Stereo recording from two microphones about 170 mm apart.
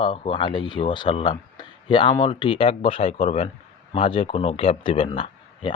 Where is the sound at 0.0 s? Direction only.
30° left (ahead or behind).